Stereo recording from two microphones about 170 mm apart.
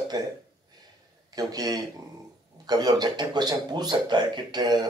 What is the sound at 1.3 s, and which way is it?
A man's voice, 20° right (ahead or behind).